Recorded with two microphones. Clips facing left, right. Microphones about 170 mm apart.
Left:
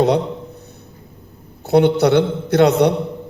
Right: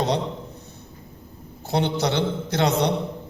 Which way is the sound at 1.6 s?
60° left (ahead or behind).